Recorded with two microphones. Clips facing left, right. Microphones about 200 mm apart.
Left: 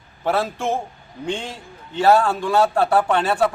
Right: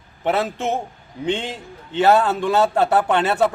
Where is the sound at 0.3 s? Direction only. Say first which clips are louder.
Even; 20° right (ahead or behind).